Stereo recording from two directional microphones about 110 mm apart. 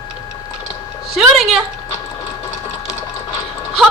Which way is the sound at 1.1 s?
5° right (ahead or behind).